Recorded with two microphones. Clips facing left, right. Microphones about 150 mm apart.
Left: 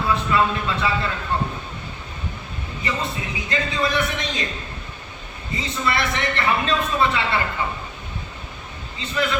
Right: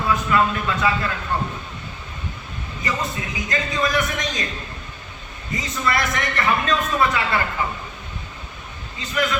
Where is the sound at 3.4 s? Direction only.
25° left (ahead or behind).